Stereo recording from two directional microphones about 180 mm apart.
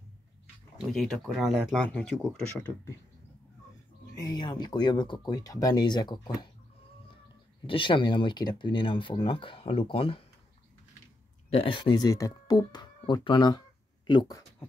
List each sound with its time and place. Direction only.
0.9 s speech: centre (ahead or behind)
4.2 s speech: 25° left (ahead or behind)
7.6 s speech: 30° left (ahead or behind)
11.5 s speech: 30° left (ahead or behind)